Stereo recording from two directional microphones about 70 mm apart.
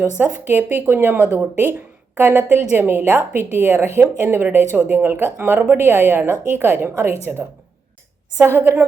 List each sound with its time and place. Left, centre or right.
0.2 s a woman's voice: right
8.4 s a woman's voice: right